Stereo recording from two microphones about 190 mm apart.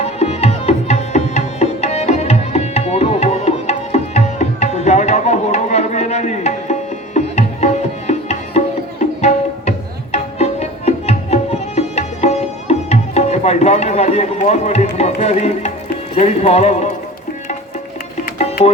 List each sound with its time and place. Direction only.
0.0 s music: 35° left (ahead or behind)
14.9 s speech: 35° left (ahead or behind)